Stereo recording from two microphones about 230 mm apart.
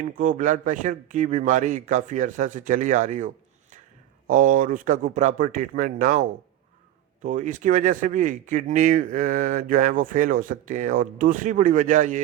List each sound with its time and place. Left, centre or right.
0.0 s speech: right